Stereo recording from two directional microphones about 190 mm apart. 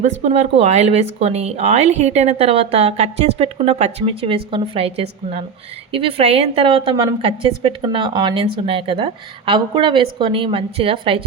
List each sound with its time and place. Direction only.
0.0 s a woman's voice: 35° right (ahead or behind)